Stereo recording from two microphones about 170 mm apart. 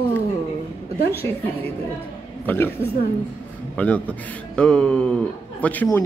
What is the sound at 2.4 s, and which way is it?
Speech, 10° left (ahead or behind).